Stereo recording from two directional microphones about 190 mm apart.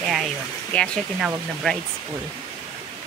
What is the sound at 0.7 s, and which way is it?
Speech, 5° left (ahead or behind).